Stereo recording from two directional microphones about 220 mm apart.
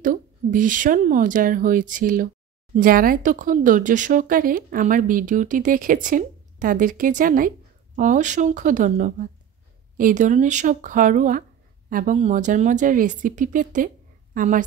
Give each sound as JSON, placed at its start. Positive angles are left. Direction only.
{"t": 0.0, "sound": "a woman's voice", "side_deg": -35}